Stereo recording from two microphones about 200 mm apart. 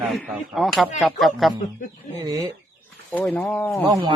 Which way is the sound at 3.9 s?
20° right (ahead or behind).